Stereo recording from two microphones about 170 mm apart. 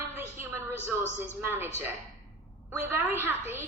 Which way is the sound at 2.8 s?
10° right (ahead or behind).